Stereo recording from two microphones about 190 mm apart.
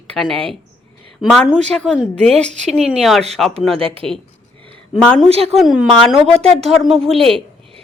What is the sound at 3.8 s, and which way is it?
Speech, 30° right (ahead or behind).